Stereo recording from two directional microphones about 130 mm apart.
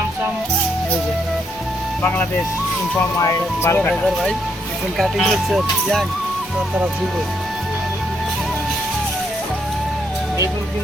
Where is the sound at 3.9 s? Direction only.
Centre (ahead or behind).